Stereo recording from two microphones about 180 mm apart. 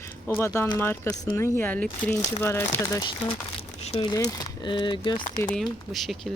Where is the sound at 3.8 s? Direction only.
35° left (ahead or behind).